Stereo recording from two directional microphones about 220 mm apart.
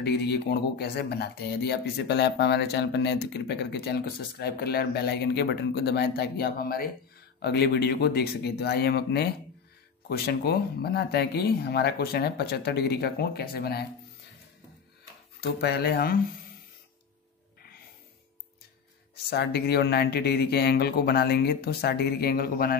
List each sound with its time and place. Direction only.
0.0 s speech: 50° left (ahead or behind)
15.4 s speech: 45° left (ahead or behind)
19.3 s speech: 50° left (ahead or behind)